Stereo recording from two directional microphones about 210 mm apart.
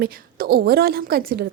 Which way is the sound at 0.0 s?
45° right (ahead or behind).